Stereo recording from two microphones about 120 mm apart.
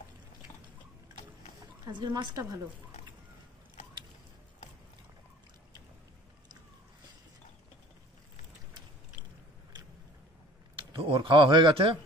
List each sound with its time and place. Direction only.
1.9 s a woman's voice: 40° right (ahead or behind)
10.8 s speech: 45° right (ahead or behind)